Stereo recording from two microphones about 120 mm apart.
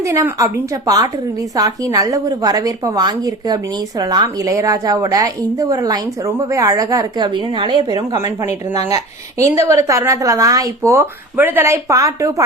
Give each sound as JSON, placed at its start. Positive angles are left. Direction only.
{"t": 0.0, "sound": "a woman's voice", "side_deg": -25}